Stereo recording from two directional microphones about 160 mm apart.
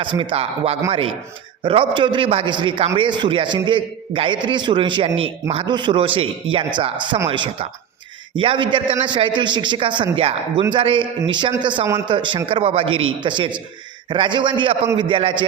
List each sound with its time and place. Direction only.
0.0 s a man's voice: 30° right (ahead or behind)